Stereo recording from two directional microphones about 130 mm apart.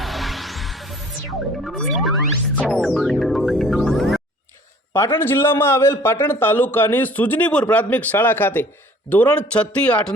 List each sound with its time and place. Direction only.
0.0 s music: centre (ahead or behind)
4.9 s a man's voice: 15° left (ahead or behind)